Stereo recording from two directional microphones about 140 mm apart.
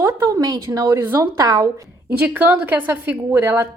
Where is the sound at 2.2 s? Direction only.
10° right (ahead or behind).